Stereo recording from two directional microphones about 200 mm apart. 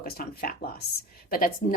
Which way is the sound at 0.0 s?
45° left (ahead or behind).